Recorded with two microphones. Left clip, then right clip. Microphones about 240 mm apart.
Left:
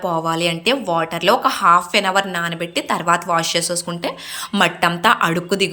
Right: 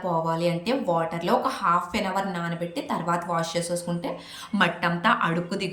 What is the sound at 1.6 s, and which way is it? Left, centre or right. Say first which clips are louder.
Speech: left 11 dB; left.